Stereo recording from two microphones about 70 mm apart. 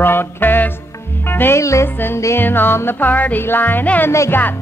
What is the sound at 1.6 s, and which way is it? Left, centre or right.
Music, left.